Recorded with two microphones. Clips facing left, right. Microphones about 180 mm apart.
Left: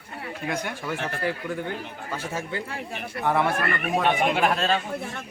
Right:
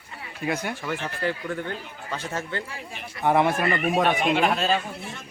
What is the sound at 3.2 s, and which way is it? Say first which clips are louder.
Speech: right 3 dB; 15° right (ahead or behind).